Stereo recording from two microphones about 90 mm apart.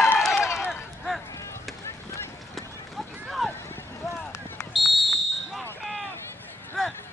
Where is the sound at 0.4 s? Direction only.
30° left (ahead or behind).